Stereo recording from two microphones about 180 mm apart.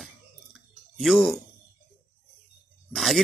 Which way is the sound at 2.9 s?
Centre (ahead or behind).